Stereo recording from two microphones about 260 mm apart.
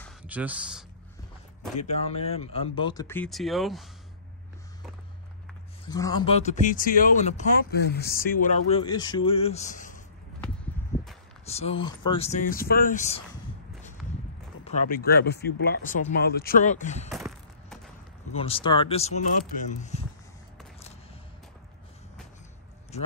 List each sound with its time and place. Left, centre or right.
0.2 s speech: centre
1.8 s speech: left; by 3.8 s centre
5.9 s speech: centre; by 10.0 s left
11.4 s speech: left
14.6 s speech: left
18.3 s speech: left
22.9 s a man's voice: left